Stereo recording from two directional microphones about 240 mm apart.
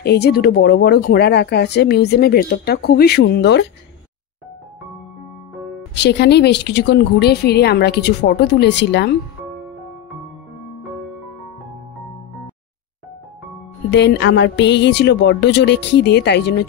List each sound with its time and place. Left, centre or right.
0.0 s speech: left
5.9 s speech: left
13.8 s speech: left